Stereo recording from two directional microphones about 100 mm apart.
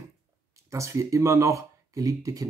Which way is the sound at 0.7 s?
30° right (ahead or behind).